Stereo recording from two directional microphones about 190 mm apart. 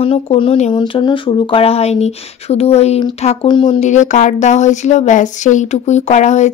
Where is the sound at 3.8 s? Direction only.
40° left (ahead or behind).